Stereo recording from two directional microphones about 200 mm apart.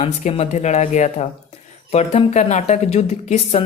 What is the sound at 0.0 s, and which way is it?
Speech, 35° left (ahead or behind).